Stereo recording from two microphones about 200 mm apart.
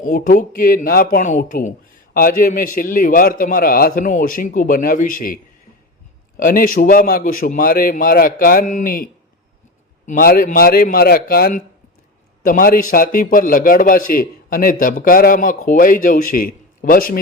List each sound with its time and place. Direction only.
0.0 s a man's voice: 40° left (ahead or behind)
10.1 s a man's voice: 45° left (ahead or behind)